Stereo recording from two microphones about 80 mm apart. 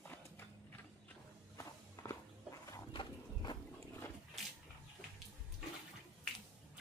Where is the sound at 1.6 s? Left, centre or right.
Left.